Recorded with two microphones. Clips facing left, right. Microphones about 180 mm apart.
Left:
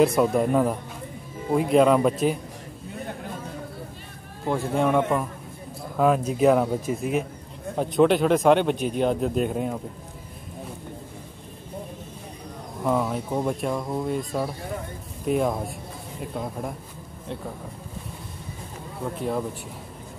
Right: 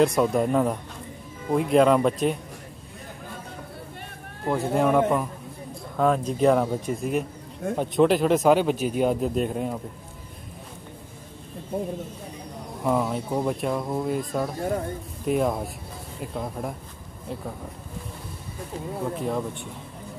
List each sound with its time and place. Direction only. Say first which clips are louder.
0.0 s speech: left 1 dB; 5° left (ahead or behind)
4.5 s speech: right 1 dB; centre (ahead or behind)
11.7 s speech: right 8 dB; 65° right (ahead or behind)
12.8 s speech: even; centre (ahead or behind)
19.1 s speech: left 2 dB; centre (ahead or behind)